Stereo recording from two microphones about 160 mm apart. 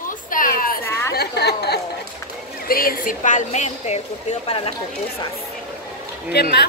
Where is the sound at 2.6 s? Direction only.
65° left (ahead or behind); by 4.7 s 40° left (ahead or behind).